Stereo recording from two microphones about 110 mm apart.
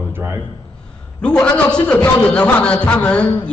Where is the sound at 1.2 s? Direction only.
10° left (ahead or behind).